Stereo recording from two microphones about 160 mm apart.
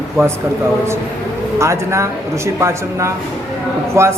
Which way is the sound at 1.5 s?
15° right (ahead or behind).